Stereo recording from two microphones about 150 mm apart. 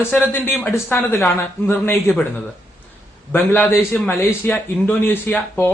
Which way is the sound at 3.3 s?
15° left (ahead or behind).